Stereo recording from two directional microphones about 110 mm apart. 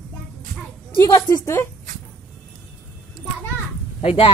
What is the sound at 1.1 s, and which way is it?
Speech, 35° left (ahead or behind).